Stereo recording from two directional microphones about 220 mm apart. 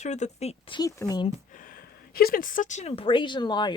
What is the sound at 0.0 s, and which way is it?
Speech, 30° left (ahead or behind).